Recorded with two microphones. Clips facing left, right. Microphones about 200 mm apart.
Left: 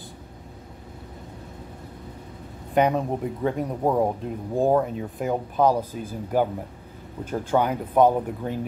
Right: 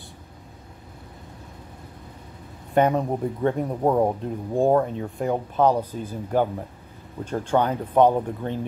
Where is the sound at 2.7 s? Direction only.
Centre (ahead or behind).